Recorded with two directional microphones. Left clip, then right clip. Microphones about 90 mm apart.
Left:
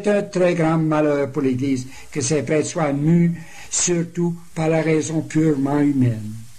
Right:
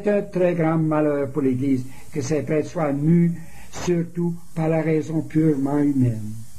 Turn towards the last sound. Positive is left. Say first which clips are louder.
# left 2 dB
turn(degrees=-30)  # may be behind; listen again after turning